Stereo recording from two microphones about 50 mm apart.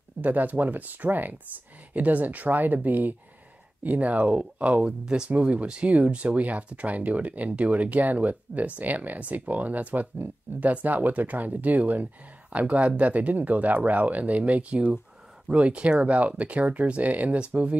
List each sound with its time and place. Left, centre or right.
0.2 s speech: right; by 5.3 s centre
5.3 s speech: right